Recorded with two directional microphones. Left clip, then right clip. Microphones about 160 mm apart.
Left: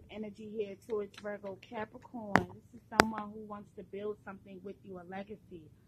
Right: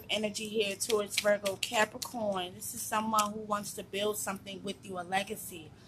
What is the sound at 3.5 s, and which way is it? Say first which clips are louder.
A woman's voice: right 11 dB; 40° left (ahead or behind).